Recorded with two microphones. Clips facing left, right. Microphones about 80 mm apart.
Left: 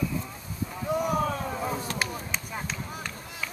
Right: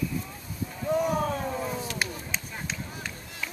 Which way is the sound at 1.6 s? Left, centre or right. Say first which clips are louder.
Left 2 dB; left.